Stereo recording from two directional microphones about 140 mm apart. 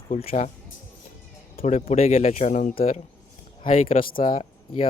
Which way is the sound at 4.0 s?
90° left.